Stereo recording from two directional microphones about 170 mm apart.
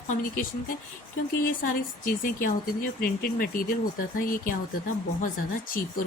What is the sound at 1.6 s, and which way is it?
Speech, 55° left (ahead or behind).